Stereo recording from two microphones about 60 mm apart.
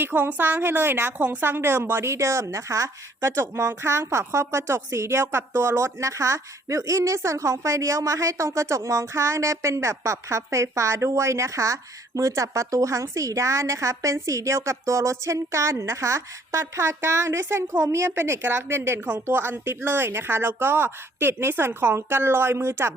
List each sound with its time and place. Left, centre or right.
0.0 s a woman's voice: right